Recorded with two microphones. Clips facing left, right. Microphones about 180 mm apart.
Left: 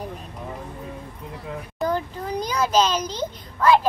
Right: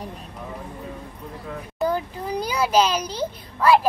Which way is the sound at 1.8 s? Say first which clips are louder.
Right 1 dB; 10° right (ahead or behind).